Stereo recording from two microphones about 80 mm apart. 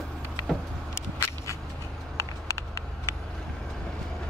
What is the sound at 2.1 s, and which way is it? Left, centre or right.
Vehicle, left.